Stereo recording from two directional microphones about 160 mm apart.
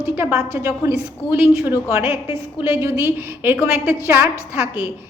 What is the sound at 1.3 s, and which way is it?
A woman's voice, 10° right (ahead or behind).